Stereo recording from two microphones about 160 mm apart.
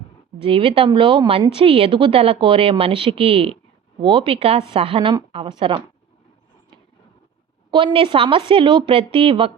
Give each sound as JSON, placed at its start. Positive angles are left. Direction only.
{"t": 0.4, "sound": "speech", "side_deg": -35}
{"t": 7.7, "sound": "speech", "side_deg": -30}